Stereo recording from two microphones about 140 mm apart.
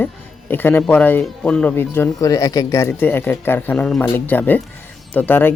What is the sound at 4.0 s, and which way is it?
Speech, 15° left (ahead or behind).